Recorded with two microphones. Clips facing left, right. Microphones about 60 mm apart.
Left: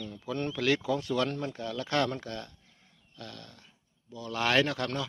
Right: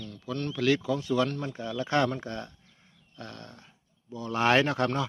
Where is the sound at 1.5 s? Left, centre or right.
Centre.